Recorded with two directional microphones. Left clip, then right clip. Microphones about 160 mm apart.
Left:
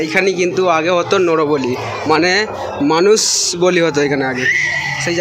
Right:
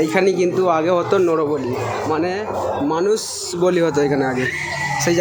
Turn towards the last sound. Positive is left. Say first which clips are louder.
# left 2 dB
turn(degrees=-10)  # may be behind; listen again after turning